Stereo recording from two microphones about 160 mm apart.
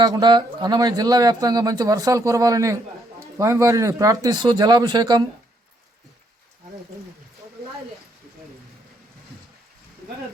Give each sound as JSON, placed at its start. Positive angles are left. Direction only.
{"t": 0.0, "sound": "speech", "side_deg": -25}